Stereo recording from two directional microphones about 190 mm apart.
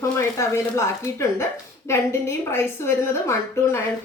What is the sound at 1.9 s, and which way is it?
A woman's voice, 15° left (ahead or behind).